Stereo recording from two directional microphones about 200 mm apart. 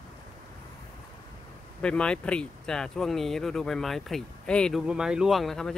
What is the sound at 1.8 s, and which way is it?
Speech, 5° left (ahead or behind).